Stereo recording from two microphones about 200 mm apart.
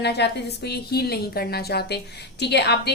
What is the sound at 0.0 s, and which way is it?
A woman's voice, 55° left (ahead or behind).